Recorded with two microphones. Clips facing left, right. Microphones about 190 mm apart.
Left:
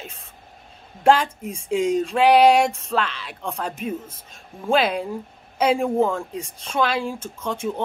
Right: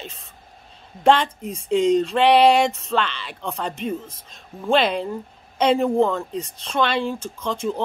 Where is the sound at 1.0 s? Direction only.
5° left (ahead or behind).